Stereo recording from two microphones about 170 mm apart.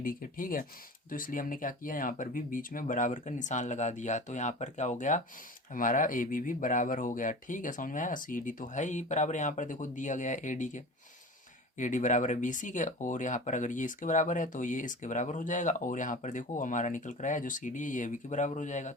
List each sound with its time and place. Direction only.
0.0 s speech: 55° left (ahead or behind)